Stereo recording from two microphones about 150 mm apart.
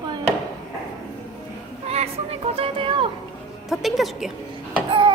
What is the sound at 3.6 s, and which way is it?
Speech, centre (ahead or behind).